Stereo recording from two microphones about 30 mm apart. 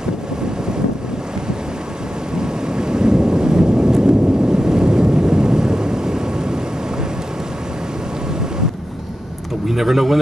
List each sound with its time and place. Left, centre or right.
2.3 s thunder: right
9.7 s speech: centre